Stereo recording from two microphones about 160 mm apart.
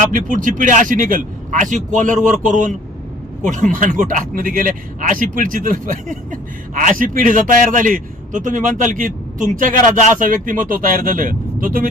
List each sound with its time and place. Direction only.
0.0 s speech: 55° right (ahead or behind)